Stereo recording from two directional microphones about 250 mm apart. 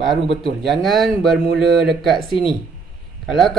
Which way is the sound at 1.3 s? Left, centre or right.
Right.